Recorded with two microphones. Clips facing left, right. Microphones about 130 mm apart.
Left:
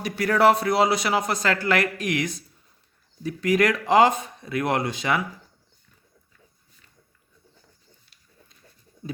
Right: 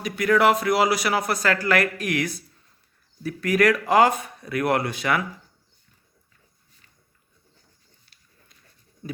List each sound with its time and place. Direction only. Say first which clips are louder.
0.0 s speech: even; 35° left (ahead or behind)